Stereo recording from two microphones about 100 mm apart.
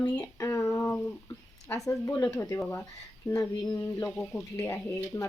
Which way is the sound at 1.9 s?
30° left (ahead or behind).